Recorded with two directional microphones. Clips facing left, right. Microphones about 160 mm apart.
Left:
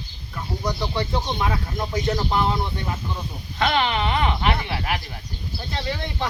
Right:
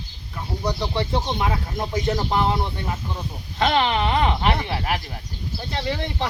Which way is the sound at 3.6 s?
35° right (ahead or behind).